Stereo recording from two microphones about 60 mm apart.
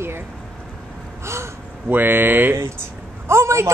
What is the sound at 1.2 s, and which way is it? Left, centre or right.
Gasp, right.